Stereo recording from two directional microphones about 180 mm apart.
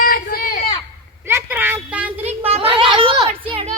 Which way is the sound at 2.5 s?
30° right (ahead or behind).